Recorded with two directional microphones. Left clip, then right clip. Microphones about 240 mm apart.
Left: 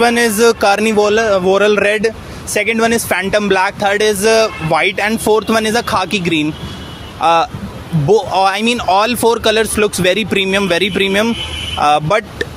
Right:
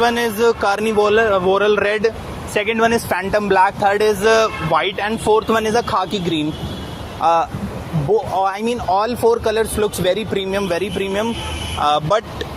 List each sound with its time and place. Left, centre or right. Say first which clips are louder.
0.0 s a man's voice: left 5 dB; left